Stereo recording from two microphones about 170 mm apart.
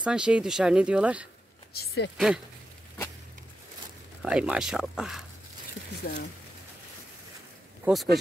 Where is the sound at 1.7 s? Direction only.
65° left (ahead or behind).